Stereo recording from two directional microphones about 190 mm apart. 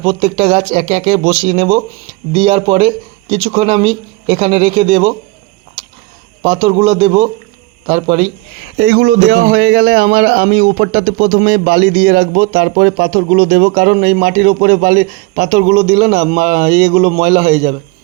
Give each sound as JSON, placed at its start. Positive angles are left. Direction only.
{"t": 0.0, "sound": "speech", "side_deg": -30}
{"t": 6.4, "sound": "a man's voice", "side_deg": -30}
{"t": 8.8, "sound": "speech", "side_deg": -60}